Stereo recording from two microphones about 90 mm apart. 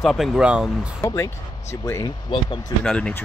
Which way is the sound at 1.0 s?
35° left (ahead or behind).